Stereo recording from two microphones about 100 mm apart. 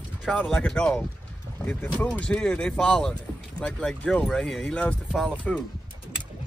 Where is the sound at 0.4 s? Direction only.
10° left (ahead or behind).